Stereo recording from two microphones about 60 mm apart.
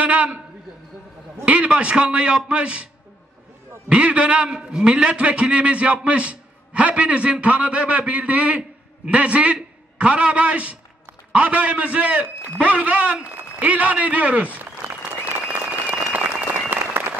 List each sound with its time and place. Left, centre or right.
0.0 s a sound: right
1.4 s a man's voice: right
3.9 s a man's voice: centre
15.2 s applause: right